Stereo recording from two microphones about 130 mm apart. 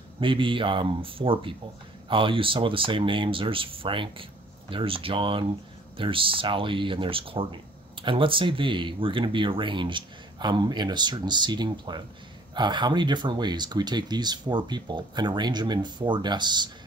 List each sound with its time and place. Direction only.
0.2 s speech: 40° right (ahead or behind)